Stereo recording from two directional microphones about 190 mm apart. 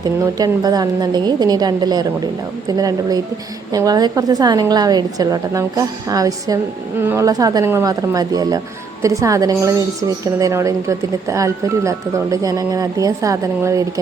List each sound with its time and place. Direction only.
0.0 s a woman's voice: 20° right (ahead or behind)